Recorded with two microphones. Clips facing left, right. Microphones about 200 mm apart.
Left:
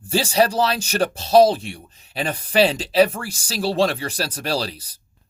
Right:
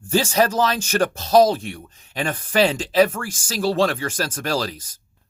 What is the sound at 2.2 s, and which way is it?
Speech, 15° left (ahead or behind).